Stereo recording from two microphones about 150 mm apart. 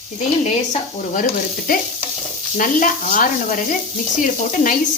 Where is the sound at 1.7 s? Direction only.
75° left (ahead or behind).